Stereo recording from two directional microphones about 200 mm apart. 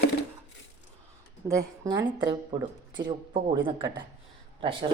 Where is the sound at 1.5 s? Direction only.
15° right (ahead or behind).